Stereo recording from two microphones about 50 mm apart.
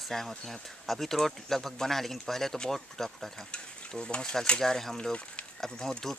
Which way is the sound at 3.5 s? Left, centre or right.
Centre.